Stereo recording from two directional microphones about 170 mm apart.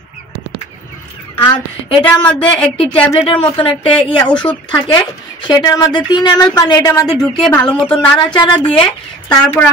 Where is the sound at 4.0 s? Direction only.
30° left (ahead or behind).